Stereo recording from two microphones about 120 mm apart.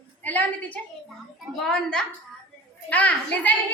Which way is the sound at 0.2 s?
15° left (ahead or behind).